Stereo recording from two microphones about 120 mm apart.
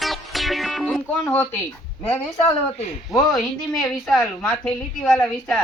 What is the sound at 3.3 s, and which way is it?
Speech, 5° left (ahead or behind).